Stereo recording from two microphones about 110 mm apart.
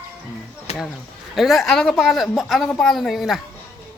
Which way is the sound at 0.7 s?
75° left (ahead or behind).